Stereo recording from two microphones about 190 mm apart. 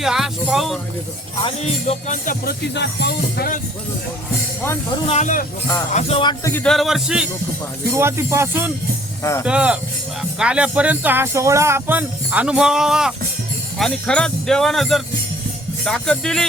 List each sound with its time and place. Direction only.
0.0 s music: centre (ahead or behind)
1.4 s music: 30° left (ahead or behind); by 3.6 s 55° left (ahead or behind)
5.0 s speech: 40° left (ahead or behind)
6.4 s speech: 10° left (ahead or behind)